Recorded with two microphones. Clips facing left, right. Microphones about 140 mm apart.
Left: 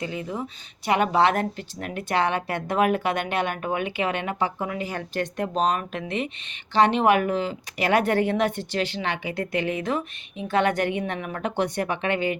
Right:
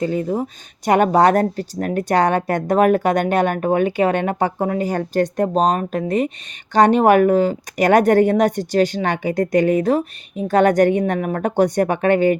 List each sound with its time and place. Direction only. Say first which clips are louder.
0.0 s speech: right 10 dB; 45° right (ahead or behind)